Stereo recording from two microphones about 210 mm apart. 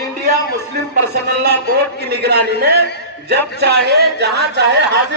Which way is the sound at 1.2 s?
50° right (ahead or behind).